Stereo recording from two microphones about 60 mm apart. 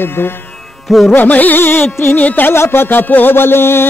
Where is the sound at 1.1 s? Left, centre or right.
Left.